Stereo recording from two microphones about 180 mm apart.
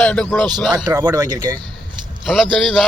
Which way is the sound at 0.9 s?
20° right (ahead or behind).